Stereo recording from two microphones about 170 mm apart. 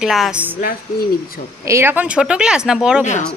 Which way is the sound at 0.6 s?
60° left (ahead or behind).